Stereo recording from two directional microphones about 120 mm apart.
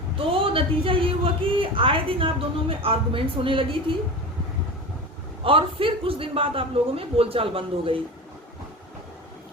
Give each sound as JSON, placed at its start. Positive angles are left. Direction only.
{"t": 0.3, "sound": "a woman's voice", "side_deg": -50}
{"t": 5.4, "sound": "a woman's voice", "side_deg": -50}